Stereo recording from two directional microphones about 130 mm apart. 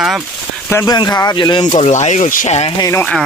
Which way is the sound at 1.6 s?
60° left (ahead or behind).